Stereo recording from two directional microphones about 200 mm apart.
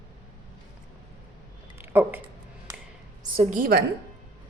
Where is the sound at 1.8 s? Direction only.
10° right (ahead or behind).